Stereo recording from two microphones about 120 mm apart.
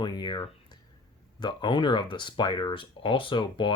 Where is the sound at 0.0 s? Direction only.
40° left (ahead or behind).